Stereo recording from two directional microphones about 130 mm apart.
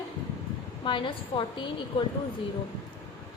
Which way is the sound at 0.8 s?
40° left (ahead or behind).